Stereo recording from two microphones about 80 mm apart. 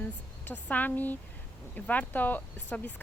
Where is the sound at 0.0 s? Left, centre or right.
Left.